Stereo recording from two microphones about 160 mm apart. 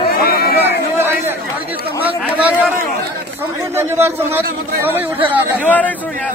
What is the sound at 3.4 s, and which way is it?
A man's voice, 15° right (ahead or behind).